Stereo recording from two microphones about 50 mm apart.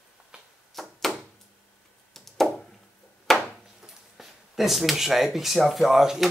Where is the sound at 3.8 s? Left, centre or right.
Centre.